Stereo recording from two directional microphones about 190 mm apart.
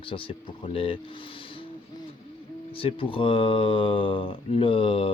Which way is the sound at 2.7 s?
30° left (ahead or behind).